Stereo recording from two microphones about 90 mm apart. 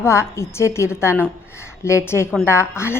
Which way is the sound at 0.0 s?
30° left (ahead or behind).